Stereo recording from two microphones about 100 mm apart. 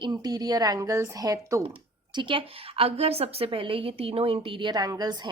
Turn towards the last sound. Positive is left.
turn(degrees=-40)  # may be behind; listen again after turning